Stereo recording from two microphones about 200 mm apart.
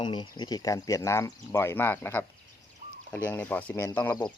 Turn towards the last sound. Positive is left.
turn(degrees=10)  # may be behind; listen again after turning